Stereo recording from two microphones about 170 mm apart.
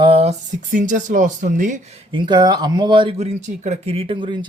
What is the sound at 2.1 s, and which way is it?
Speech, 25° right (ahead or behind).